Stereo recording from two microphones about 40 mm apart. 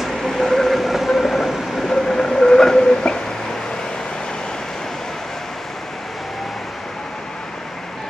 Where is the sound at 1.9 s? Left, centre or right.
Centre.